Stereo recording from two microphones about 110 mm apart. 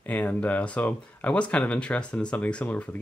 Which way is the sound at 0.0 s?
15° left (ahead or behind).